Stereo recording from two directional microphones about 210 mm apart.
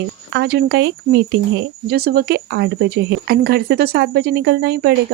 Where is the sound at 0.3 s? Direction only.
55° right (ahead or behind).